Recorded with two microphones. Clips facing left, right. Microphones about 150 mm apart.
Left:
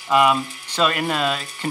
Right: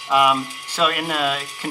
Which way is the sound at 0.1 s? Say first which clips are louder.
Left 1 dB; 5° right (ahead or behind).